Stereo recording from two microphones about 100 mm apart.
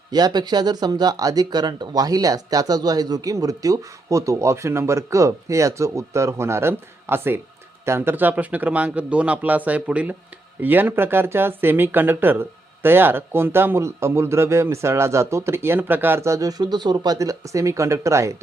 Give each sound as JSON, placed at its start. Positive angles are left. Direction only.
{"t": 0.1, "sound": "speech", "side_deg": -45}